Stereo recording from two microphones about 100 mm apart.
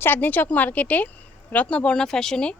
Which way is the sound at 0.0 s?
20° left (ahead or behind).